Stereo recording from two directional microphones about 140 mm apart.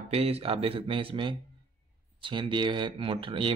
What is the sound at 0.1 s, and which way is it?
Speech, 45° right (ahead or behind).